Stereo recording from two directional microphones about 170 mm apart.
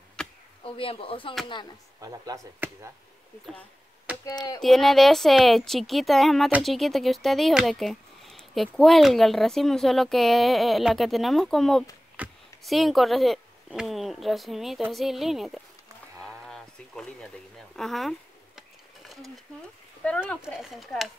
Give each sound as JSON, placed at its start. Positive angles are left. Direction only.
{"t": 0.2, "sound": "a sound", "side_deg": 5}
{"t": 0.7, "sound": "speech", "side_deg": 30}
{"t": 2.0, "sound": "speech", "side_deg": -20}
{"t": 4.3, "sound": "speech", "side_deg": 20}
{"t": 4.6, "sound": "speech", "side_deg": 0}
{"t": 16.4, "sound": "a sound", "side_deg": 5}
{"t": 17.7, "sound": "speech", "side_deg": 0}